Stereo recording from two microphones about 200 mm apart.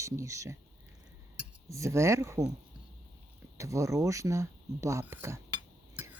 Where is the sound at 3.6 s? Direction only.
15° right (ahead or behind).